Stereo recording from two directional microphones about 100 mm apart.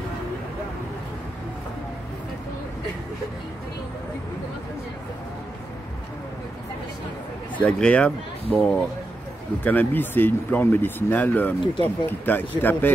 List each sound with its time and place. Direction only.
7.6 s speech: 10° left (ahead or behind)